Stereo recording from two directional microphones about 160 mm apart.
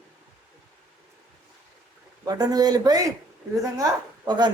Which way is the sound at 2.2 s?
25° right (ahead or behind).